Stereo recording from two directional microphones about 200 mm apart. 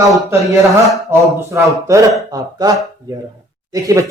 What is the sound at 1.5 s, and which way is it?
Speech, 15° right (ahead or behind).